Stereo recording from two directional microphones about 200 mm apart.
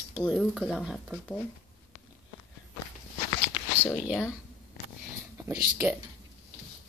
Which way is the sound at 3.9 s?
5° right (ahead or behind).